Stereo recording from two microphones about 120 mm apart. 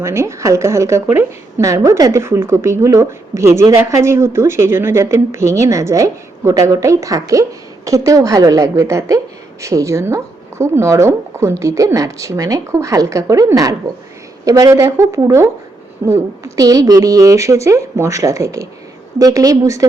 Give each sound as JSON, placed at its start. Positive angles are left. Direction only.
{"t": 0.0, "sound": "a woman's voice", "side_deg": -25}